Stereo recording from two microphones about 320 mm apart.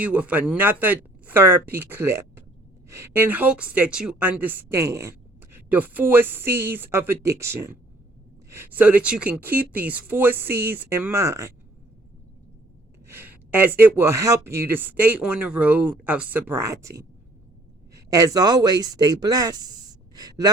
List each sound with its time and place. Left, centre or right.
0.0 s speech: centre
13.1 s speech: centre